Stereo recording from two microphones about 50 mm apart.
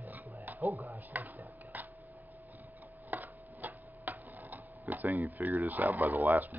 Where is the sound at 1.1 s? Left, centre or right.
Right.